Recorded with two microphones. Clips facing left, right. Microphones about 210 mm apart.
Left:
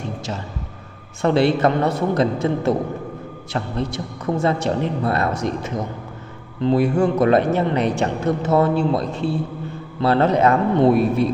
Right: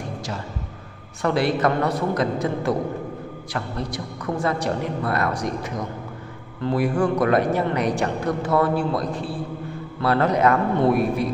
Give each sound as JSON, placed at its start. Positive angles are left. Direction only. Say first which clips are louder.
{"t": 1.2, "sound": "speech", "louder": "left 4 dB", "side_deg": 25}